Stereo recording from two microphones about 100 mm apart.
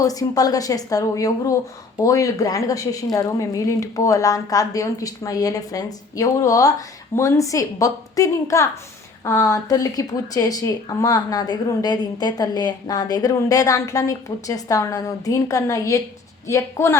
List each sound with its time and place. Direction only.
0.0 s a woman's voice: 35° left (ahead or behind)